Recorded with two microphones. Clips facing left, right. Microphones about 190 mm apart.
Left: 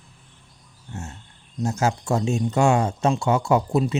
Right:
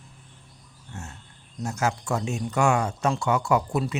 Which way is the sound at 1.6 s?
25° left (ahead or behind).